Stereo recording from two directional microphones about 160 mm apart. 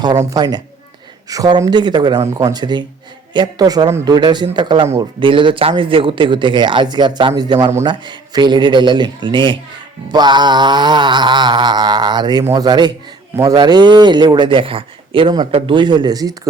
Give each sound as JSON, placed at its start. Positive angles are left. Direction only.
{"t": 0.0, "sound": "speech", "side_deg": -25}